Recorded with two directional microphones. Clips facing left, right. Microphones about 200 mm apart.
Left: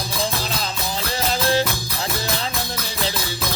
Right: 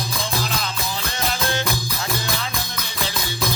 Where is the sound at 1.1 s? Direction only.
35° left (ahead or behind).